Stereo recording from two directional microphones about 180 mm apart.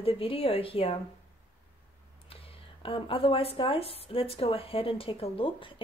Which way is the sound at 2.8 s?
30° left (ahead or behind).